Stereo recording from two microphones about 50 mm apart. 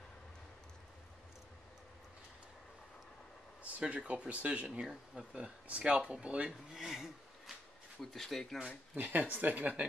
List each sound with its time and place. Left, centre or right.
3.8 s speech: right
6.7 s speech: centre
8.0 s speech: centre
8.9 s speech: right